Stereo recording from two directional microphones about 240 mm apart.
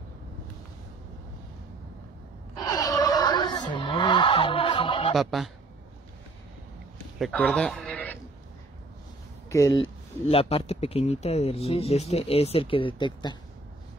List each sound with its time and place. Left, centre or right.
2.5 s a sound: centre
5.1 s speech: centre
7.2 s speech: centre
9.5 s speech: centre
10.2 s speech: left